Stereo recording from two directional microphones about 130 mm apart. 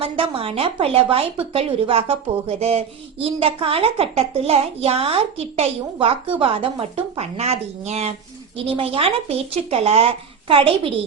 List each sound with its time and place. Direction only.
0.0 s a woman's voice: 45° right (ahead or behind)